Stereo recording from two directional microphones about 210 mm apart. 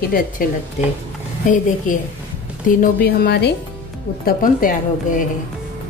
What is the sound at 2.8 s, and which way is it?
Speech, 50° left (ahead or behind).